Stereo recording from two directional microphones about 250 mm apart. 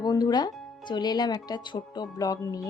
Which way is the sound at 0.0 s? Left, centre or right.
Centre.